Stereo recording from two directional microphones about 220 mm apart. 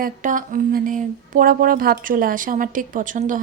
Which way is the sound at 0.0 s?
35° right (ahead or behind).